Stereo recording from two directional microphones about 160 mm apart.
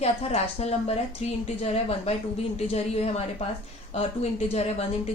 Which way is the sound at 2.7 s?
40° left (ahead or behind).